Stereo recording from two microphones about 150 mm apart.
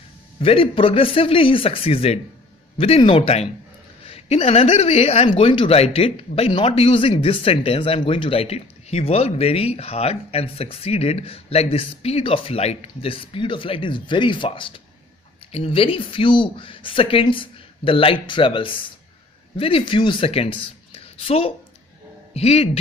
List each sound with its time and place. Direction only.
0.4 s speech: 40° left (ahead or behind)